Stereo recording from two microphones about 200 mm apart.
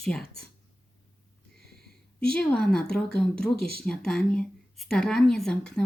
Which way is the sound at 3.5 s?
50° left (ahead or behind).